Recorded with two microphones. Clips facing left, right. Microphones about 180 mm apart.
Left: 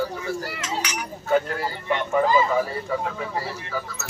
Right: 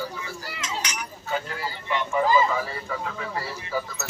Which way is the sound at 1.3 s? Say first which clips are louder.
Left 8 dB; 50° left (ahead or behind).